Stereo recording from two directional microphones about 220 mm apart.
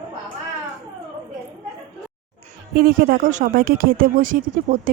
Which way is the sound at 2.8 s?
40° right (ahead or behind).